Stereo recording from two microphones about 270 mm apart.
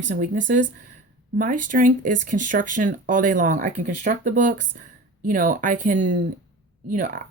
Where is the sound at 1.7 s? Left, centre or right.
Right.